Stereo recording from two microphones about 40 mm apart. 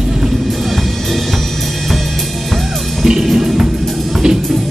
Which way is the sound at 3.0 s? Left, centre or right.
Centre.